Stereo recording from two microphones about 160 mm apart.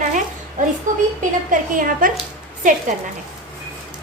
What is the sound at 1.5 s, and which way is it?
A woman's voice, 60° right (ahead or behind).